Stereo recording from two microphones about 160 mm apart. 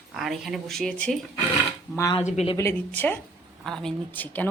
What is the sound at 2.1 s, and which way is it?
Speech, 40° left (ahead or behind).